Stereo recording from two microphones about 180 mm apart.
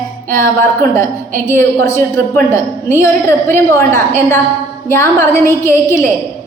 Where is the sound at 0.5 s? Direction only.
15° left (ahead or behind).